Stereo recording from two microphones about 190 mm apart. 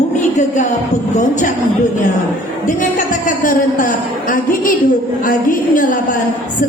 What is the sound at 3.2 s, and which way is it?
A woman's voice, 45° left (ahead or behind).